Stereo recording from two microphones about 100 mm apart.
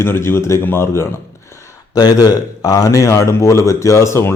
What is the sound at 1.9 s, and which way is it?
A man's voice, 40° left (ahead or behind).